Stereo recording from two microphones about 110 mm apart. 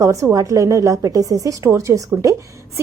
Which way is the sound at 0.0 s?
30° right (ahead or behind).